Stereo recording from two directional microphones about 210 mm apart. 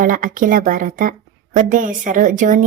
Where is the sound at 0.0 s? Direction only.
40° right (ahead or behind).